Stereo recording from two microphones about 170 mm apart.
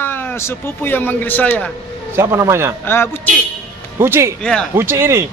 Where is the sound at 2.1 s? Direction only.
15° right (ahead or behind).